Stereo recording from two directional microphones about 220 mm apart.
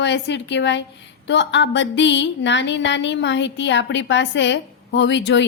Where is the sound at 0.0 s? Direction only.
55° left (ahead or behind).